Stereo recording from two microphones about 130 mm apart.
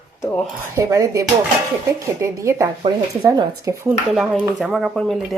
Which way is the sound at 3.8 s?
10° right (ahead or behind).